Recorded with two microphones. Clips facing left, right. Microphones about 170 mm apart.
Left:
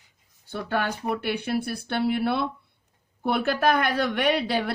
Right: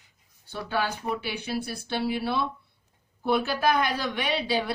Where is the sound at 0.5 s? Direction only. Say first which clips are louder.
Left 2 dB; 55° left (ahead or behind).